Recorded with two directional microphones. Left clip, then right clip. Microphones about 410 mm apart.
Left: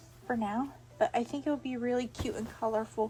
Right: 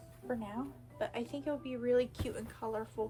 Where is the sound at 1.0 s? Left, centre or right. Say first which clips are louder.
Left 9 dB; centre.